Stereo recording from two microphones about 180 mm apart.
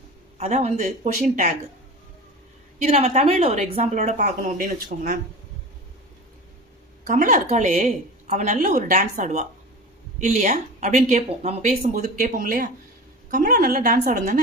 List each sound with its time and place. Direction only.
0.3 s speech: 35° right (ahead or behind)
2.8 s speech: 35° right (ahead or behind)
7.1 s speech: 45° right (ahead or behind)